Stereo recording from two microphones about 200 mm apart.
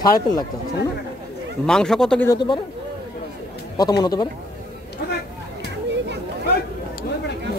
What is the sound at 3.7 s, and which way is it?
Speech, 20° left (ahead or behind).